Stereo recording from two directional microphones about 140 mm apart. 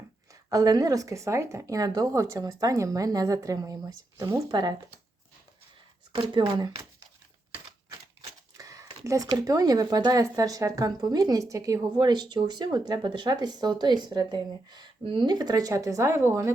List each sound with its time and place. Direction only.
0.5 s speech: 25° right (ahead or behind)
6.3 s speech: 30° right (ahead or behind)
8.5 s speech: 25° right (ahead or behind)